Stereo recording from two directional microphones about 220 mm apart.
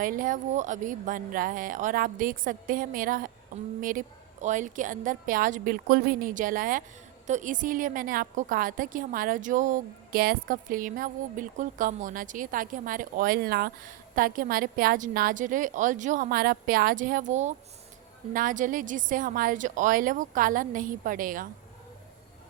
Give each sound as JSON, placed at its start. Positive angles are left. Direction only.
{"t": 0.0, "sound": "a woman's voice", "side_deg": -40}